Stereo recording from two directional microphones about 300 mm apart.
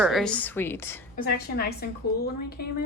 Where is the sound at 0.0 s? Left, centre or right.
Centre.